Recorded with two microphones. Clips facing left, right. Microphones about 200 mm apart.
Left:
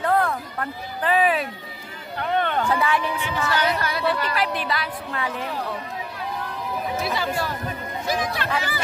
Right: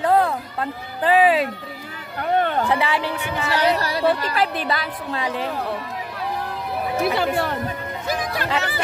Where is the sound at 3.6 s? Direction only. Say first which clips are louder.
Right 4 dB; 35° right (ahead or behind).